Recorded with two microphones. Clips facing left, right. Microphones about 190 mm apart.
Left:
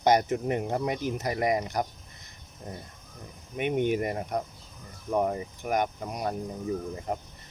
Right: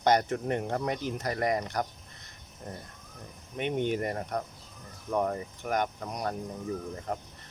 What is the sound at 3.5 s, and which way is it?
Speech, 10° left (ahead or behind).